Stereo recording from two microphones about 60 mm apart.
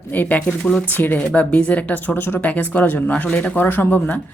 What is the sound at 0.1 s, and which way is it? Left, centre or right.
Speech, left.